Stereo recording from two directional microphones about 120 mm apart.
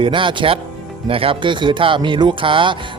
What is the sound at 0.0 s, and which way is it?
Speech, 45° right (ahead or behind).